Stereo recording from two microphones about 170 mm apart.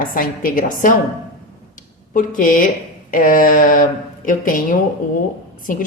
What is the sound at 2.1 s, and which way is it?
A woman's voice, 50° left (ahead or behind).